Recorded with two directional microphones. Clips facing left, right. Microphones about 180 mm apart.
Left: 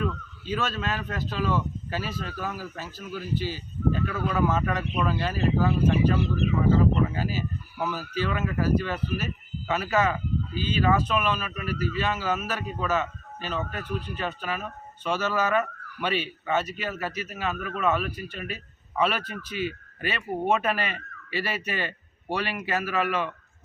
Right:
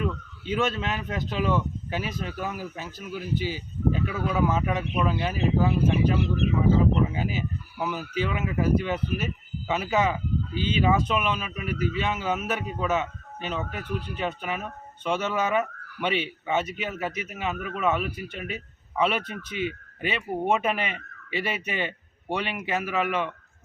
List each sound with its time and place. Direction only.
0.0 s a man's voice: 20° right (ahead or behind)